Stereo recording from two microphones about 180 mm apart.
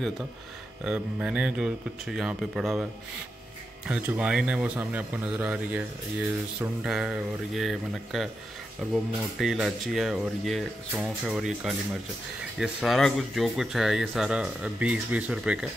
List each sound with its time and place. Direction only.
0.8 s speech: 5° right (ahead or behind)